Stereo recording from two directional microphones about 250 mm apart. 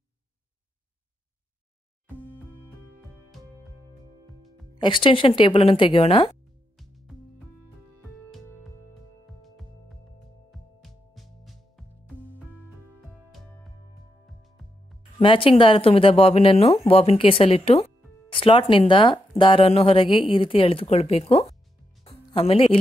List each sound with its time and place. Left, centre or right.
4.7 s speech: centre
6.8 s music: centre
9.4 s music: centre
14.2 s music: centre
15.1 s speech: left
22.0 s music: left